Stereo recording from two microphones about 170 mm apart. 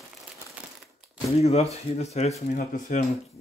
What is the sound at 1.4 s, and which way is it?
Speech, 35° left (ahead or behind).